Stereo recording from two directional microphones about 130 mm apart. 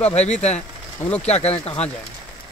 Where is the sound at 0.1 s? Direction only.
60° left (ahead or behind).